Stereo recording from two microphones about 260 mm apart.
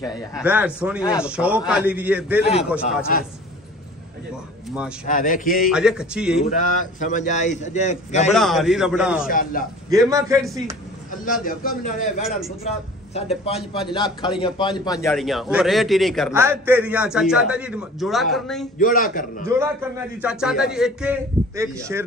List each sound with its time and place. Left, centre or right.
0.0 s a man's voice: centre
0.4 s a man's voice: centre
4.6 s a man's voice: centre
5.0 s speech: left
5.7 s a man's voice: centre
6.5 s a man's voice: left
8.3 s a man's voice: centre
9.2 s speech: left
9.8 s a man's voice: centre
11.4 s a man's voice: left
15.0 s a man's voice: centre
18.8 s speech: left
19.5 s a man's voice: centre